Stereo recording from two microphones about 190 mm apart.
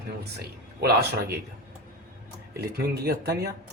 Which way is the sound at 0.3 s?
60° right (ahead or behind).